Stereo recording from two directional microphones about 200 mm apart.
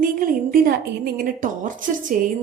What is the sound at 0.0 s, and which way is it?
A woman's voice, 45° right (ahead or behind).